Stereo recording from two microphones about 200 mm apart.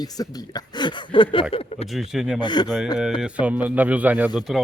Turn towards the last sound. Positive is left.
turn(degrees=-5)  # may be behind; listen again after turning